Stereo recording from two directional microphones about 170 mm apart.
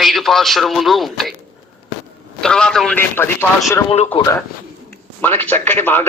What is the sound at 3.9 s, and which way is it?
Speech, 30° left (ahead or behind).